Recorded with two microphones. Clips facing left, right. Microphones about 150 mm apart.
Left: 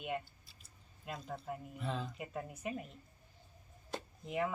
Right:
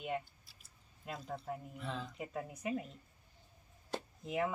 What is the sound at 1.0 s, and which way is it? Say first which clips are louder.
Speech: right 1 dB; centre (ahead or behind).